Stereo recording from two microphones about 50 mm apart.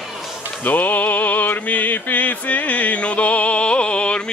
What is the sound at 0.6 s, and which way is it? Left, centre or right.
Music, left.